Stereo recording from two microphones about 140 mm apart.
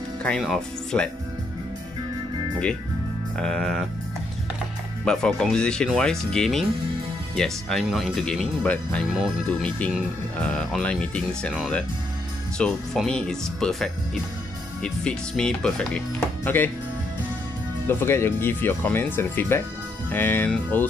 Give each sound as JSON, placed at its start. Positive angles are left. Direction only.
{"t": 0.2, "sound": "speech", "side_deg": 0}
{"t": 3.3, "sound": "speech", "side_deg": 5}
{"t": 5.0, "sound": "speech", "side_deg": 5}
{"t": 12.5, "sound": "speech", "side_deg": 5}
{"t": 17.8, "sound": "speech", "side_deg": 15}